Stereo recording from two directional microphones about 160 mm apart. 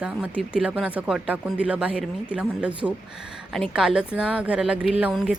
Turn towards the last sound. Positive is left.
turn(degrees=-5)  # may be behind; listen again after turning